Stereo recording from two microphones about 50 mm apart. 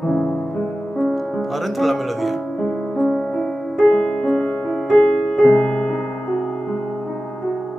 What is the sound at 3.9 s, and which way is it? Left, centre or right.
Music, left.